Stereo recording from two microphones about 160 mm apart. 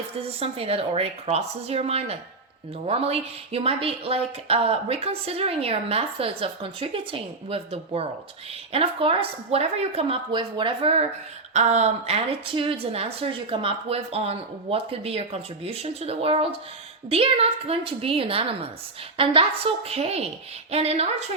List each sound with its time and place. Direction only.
0.2 s speech: 35° right (ahead or behind)
11.5 s speech: 45° right (ahead or behind)